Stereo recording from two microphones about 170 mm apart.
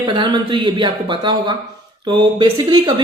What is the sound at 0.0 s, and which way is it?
Speech, 25° right (ahead or behind).